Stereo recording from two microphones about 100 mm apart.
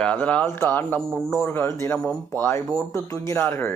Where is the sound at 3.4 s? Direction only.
20° left (ahead or behind).